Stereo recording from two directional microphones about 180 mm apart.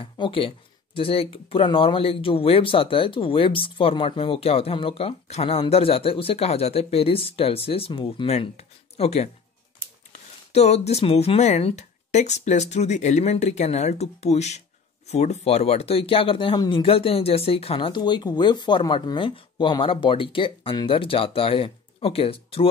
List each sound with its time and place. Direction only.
0.0 s speech: 30° left (ahead or behind)
10.5 s speech: 35° left (ahead or behind)